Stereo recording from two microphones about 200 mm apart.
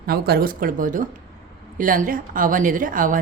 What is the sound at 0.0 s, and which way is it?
A woman's voice, 50° right (ahead or behind).